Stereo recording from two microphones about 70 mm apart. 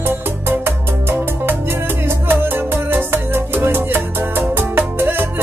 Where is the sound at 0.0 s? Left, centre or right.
Right.